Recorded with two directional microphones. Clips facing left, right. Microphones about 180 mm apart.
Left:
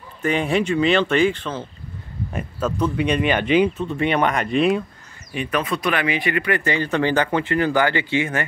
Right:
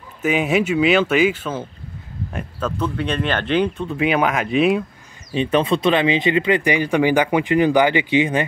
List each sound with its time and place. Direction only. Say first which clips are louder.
0.2 s speech: right 2 dB; 5° right (ahead or behind)
2.3 s speech: left 1 dB; 10° left (ahead or behind)
5.3 s speech: right 6 dB; 25° right (ahead or behind)